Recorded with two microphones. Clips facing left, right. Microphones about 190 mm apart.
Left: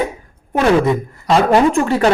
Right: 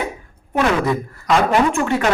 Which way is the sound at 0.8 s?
20° left (ahead or behind).